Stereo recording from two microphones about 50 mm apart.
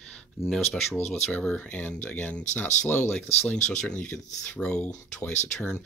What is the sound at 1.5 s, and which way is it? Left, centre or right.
Speech, left.